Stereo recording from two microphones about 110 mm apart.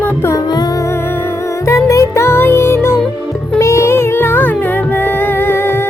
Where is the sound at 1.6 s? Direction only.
30° left (ahead or behind).